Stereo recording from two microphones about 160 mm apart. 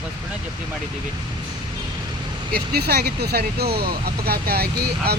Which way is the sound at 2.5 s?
80° right.